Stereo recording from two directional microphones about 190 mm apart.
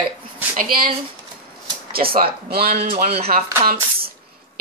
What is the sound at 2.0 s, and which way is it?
Speech, 45° right (ahead or behind).